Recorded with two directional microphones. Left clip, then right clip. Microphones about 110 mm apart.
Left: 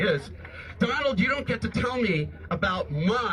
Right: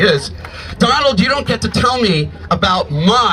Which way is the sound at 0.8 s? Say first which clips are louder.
Right 12 dB; 45° right (ahead or behind).